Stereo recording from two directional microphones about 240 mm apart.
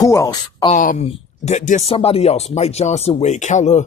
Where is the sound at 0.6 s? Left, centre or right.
Left.